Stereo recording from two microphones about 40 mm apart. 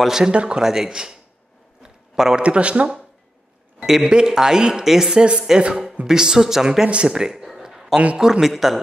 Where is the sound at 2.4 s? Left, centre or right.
Right.